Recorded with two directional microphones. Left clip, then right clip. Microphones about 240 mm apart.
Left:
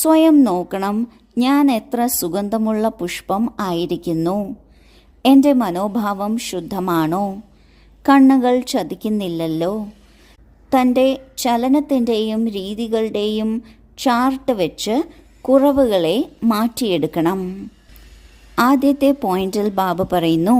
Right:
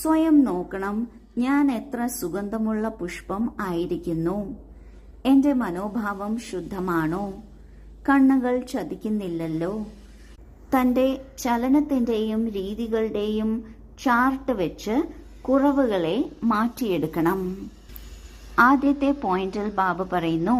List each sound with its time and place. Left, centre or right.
0.0 s a woman's voice: left
18.5 s a woman's voice: left